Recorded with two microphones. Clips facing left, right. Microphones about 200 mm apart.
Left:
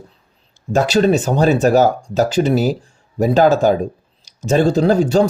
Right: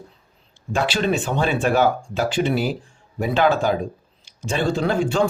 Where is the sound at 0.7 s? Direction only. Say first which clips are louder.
Left 7 dB; 40° left (ahead or behind).